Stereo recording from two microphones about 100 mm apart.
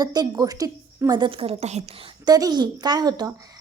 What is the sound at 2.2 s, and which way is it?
A woman's voice, 40° right (ahead or behind).